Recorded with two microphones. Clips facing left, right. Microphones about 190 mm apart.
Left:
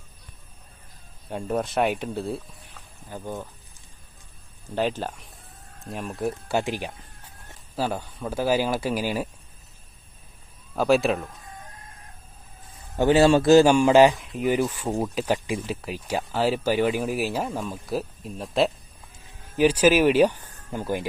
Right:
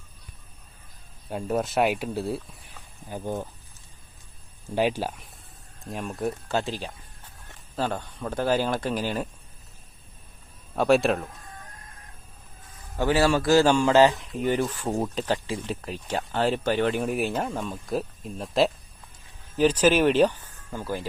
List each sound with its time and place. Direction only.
1.3 s speech: centre (ahead or behind)
3.1 s speech: 20° right (ahead or behind)
4.7 s speech: 10° right (ahead or behind)
6.5 s speech: 15° left (ahead or behind)
10.8 s speech: centre (ahead or behind)
13.0 s speech: 20° left (ahead or behind)